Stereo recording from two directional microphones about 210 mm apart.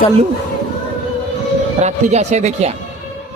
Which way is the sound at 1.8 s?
30° right (ahead or behind).